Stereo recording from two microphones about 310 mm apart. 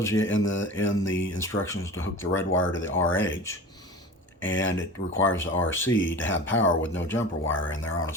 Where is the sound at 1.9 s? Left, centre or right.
Left.